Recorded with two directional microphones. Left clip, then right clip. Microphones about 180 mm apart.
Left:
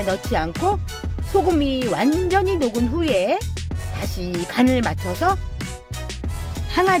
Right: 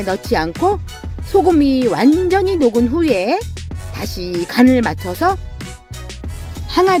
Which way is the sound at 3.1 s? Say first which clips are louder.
Right 1 dB; 35° right (ahead or behind).